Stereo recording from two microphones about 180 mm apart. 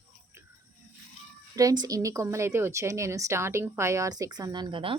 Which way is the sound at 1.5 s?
20° right (ahead or behind).